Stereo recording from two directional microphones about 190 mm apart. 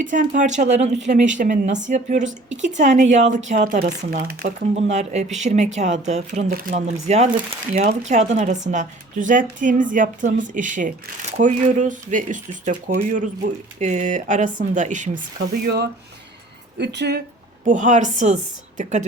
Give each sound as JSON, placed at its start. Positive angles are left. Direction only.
{"t": 0.0, "sound": "speech", "side_deg": -40}
{"t": 4.7, "sound": "speech", "side_deg": -35}
{"t": 17.7, "sound": "speech", "side_deg": -40}